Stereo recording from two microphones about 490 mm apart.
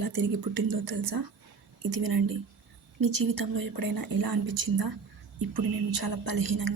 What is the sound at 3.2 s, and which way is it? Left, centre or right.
A woman's voice, right.